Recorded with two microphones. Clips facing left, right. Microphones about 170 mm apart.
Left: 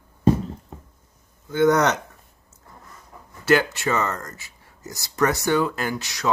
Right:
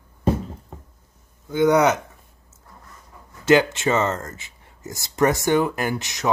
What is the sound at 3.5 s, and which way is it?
Speech, 20° right (ahead or behind).